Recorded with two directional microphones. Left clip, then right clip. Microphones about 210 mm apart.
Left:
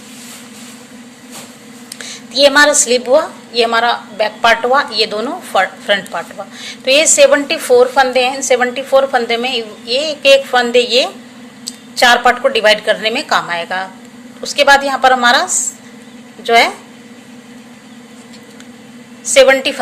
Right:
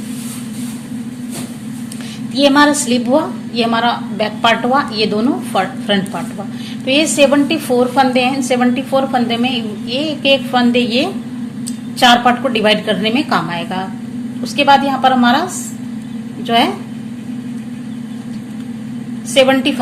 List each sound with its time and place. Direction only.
2.3 s a woman's voice: 30° left (ahead or behind)
16.5 s a woman's voice: 35° left (ahead or behind)
19.3 s a woman's voice: 30° left (ahead or behind)